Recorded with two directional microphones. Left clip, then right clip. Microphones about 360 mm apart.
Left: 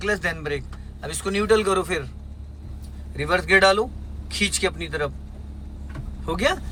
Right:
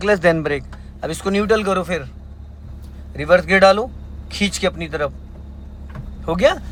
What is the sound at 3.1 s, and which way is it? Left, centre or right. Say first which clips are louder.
A man's voice: right 5 dB; centre.